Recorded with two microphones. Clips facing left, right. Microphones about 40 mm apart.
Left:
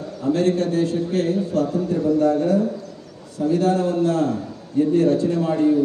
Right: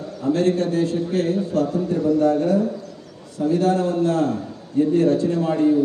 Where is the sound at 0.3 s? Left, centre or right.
Right.